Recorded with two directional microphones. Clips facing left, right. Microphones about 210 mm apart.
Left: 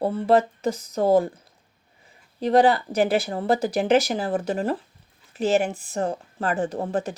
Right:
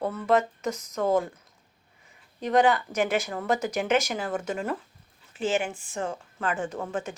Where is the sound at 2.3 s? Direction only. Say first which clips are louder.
Left 4 dB; 35° left (ahead or behind).